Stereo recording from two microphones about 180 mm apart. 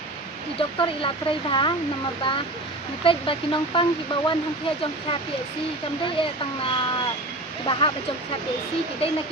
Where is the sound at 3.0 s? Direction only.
30° left (ahead or behind).